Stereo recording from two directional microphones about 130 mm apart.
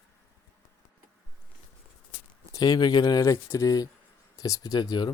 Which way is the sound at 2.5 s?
30° left (ahead or behind).